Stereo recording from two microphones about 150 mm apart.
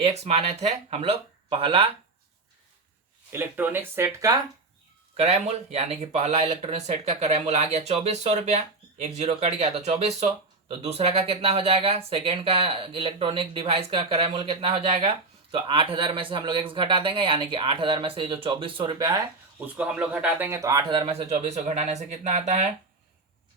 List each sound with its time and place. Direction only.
0.0 s speech: 45° right (ahead or behind)
3.3 s speech: 15° right (ahead or behind)
5.1 s speech: 45° right (ahead or behind)
18.9 s speech: 25° right (ahead or behind)
19.5 s speech: 10° right (ahead or behind); by 21.2 s 40° right (ahead or behind)
21.3 s speech: 55° right (ahead or behind)